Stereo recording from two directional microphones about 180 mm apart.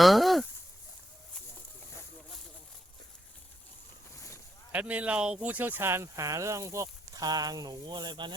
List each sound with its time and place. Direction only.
0.0 s speech: centre (ahead or behind)
4.7 s speech: 5° right (ahead or behind); by 8.4 s 25° right (ahead or behind)